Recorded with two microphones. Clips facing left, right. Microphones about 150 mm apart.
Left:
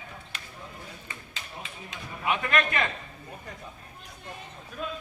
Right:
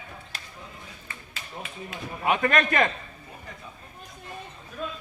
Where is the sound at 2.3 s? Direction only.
45° right (ahead or behind).